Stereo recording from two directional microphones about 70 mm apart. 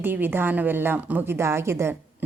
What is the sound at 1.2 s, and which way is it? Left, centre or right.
Speech, right.